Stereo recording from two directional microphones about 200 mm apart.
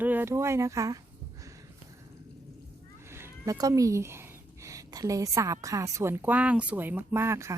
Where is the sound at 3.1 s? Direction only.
15° right (ahead or behind).